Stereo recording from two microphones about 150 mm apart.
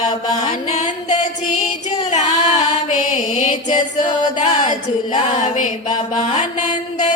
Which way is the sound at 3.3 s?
50° left (ahead or behind).